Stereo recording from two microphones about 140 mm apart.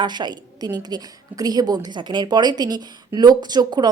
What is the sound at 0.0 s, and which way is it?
A woman's voice, 30° right (ahead or behind).